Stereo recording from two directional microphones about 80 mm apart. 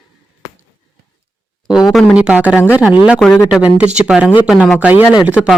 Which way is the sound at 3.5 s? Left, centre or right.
Centre.